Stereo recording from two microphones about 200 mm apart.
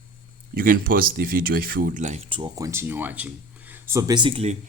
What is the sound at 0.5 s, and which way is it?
Speech, 45° right (ahead or behind).